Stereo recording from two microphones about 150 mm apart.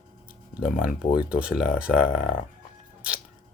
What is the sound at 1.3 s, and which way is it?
Speech, 5° right (ahead or behind).